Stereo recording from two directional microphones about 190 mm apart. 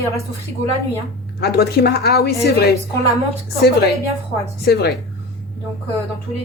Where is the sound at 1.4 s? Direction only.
55° left (ahead or behind).